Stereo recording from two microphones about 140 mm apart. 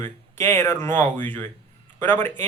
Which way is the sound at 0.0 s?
15° left (ahead or behind).